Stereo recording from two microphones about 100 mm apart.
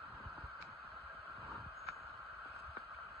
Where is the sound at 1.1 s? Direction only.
25° right (ahead or behind).